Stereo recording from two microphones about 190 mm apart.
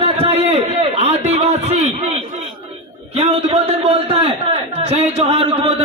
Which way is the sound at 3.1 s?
35° right (ahead or behind).